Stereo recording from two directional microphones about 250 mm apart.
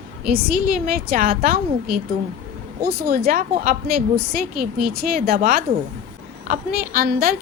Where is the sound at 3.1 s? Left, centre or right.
Right.